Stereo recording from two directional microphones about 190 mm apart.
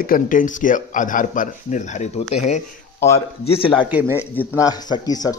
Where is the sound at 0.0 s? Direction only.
45° left (ahead or behind); by 3.7 s 30° left (ahead or behind).